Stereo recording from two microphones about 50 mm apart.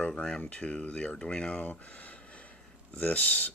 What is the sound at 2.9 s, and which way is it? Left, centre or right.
Speech, left.